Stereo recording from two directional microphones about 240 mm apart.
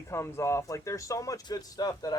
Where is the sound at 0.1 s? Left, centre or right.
Centre.